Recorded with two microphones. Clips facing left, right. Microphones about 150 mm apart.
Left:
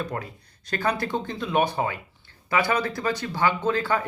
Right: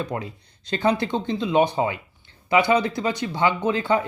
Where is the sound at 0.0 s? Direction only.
20° right (ahead or behind).